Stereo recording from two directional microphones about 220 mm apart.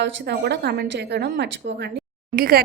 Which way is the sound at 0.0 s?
50° right (ahead or behind).